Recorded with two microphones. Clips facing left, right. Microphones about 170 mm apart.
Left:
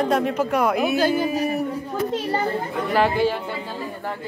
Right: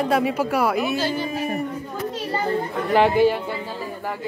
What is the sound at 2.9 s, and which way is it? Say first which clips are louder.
Speech: right 3 dB; 20° right (ahead or behind).